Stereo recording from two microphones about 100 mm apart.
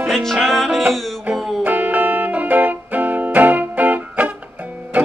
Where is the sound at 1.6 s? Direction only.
15° right (ahead or behind).